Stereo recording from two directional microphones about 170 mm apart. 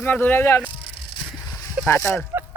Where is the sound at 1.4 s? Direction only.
15° left (ahead or behind).